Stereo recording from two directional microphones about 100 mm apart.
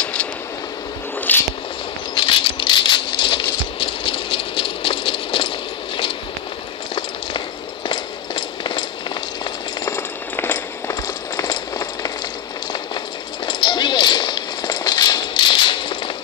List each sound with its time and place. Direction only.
0.0 s vehicle: 10° left (ahead or behind)
1.3 s squish: 20° left (ahead or behind)
2.1 s patter: 55° left (ahead or behind)
3.8 s rattle: 60° left (ahead or behind)
7.9 s a sound: 50° left (ahead or behind)
9.8 s a sound: 25° left (ahead or behind)
11.4 s run: 45° left (ahead or behind)
13.5 s run: 50° left (ahead or behind)